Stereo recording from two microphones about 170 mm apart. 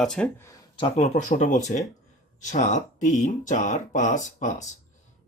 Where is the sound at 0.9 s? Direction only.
45° left (ahead or behind).